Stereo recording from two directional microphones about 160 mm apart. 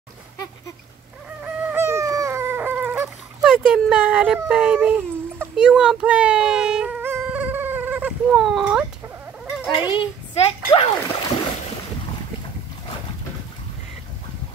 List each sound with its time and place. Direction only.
1.4 s baby cry: 15° right (ahead or behind)
3.4 s speech: 5° right (ahead or behind)
9.8 s a child's voice: 30° left (ahead or behind)